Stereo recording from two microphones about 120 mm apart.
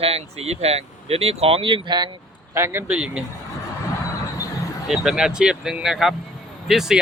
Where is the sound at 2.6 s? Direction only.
20° right (ahead or behind).